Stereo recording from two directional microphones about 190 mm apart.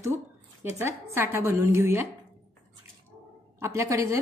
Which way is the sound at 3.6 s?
15° right (ahead or behind).